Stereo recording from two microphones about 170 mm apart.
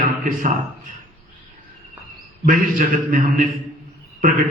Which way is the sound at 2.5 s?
50° right (ahead or behind).